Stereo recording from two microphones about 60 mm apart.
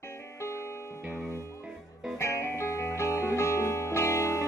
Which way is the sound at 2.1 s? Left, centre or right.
Left.